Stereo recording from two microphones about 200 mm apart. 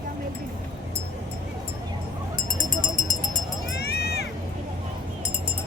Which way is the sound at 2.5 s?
40° left (ahead or behind).